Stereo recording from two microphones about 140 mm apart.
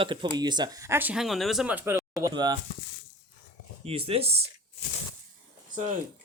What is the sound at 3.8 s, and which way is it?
Speech, 45° right (ahead or behind).